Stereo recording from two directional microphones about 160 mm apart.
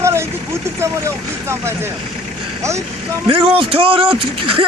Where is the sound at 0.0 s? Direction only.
15° right (ahead or behind).